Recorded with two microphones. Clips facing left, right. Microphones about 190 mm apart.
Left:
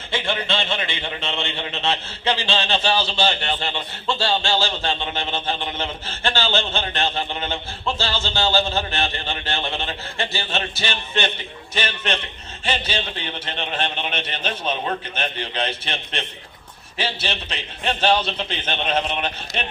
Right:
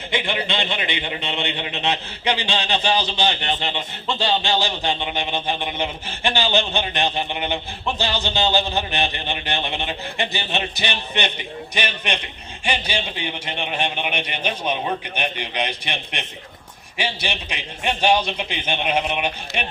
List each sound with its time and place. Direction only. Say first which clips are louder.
0.1 s a man's voice: even; 15° right (ahead or behind)